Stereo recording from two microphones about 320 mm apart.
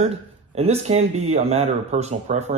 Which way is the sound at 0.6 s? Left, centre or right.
Centre.